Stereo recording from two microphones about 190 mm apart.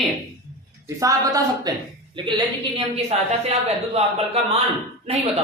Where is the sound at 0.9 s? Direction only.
20° right (ahead or behind).